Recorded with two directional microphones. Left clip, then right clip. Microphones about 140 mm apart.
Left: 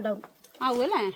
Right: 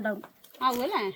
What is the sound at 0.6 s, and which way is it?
Speech, 65° left (ahead or behind).